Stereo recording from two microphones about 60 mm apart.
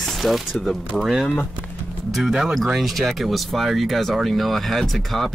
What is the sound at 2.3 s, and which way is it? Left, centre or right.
Speech, centre.